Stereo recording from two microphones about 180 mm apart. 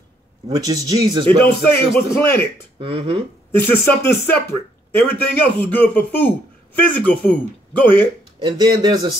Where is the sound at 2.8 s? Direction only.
30° right (ahead or behind).